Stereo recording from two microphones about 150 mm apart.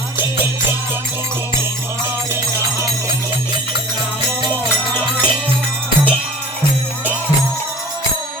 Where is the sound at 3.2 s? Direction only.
30° right (ahead or behind).